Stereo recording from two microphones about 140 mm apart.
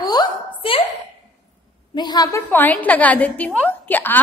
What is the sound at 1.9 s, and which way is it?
Speech, 30° left (ahead or behind).